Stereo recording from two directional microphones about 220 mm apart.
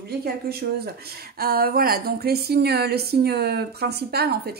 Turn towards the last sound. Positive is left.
turn(degrees=-45)  # may be behind; listen again after turning